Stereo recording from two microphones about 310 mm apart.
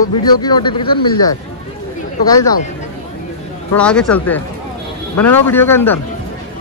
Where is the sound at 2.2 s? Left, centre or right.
Centre.